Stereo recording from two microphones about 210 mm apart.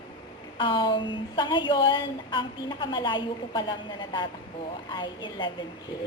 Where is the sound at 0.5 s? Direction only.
20° left (ahead or behind).